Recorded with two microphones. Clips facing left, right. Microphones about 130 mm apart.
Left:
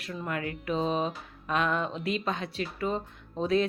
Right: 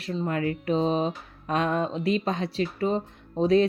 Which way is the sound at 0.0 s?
30° right (ahead or behind).